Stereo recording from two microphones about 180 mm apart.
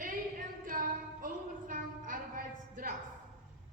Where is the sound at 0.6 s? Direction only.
50° right (ahead or behind).